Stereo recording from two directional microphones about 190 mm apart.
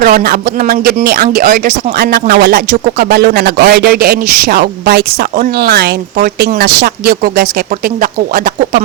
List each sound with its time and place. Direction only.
0.0 s speech: 50° right (ahead or behind)